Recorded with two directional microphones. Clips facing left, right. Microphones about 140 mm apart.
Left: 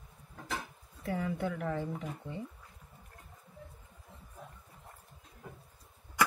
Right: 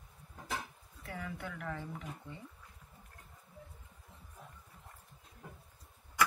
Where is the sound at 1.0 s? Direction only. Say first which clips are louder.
Left 9 dB; 30° left (ahead or behind).